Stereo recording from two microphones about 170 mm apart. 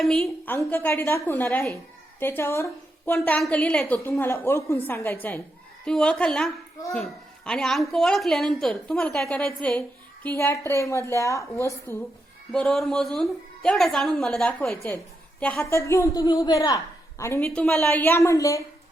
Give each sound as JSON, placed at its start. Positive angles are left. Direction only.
{"t": 0.0, "sound": "a woman's voice", "side_deg": 5}
{"t": 3.2, "sound": "a woman's voice", "side_deg": 5}
{"t": 12.5, "sound": "a woman's voice", "side_deg": 0}